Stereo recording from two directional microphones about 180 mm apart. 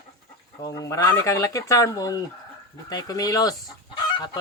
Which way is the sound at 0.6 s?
20° left (ahead or behind).